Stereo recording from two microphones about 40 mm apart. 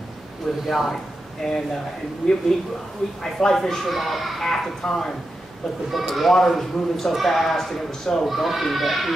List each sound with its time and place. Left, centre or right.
0.7 s speech: centre
5.9 s speech: centre
8.3 s speech: centre